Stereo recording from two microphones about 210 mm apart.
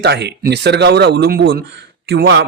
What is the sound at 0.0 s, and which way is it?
Speech, 50° right (ahead or behind).